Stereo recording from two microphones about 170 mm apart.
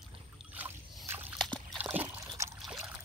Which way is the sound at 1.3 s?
5° left (ahead or behind).